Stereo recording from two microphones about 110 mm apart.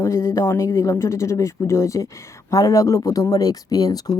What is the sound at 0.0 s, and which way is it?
Speech, 25° left (ahead or behind).